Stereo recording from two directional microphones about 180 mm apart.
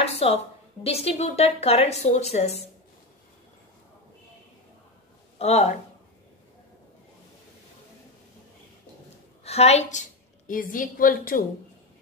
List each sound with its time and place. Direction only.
0.0 s a sound: 35° left (ahead or behind)
0.8 s a woman's voice: 35° left (ahead or behind)
5.4 s a woman's voice: 40° left (ahead or behind)
9.4 s a woman's voice: 35° left (ahead or behind); by 11.4 s 50° left (ahead or behind)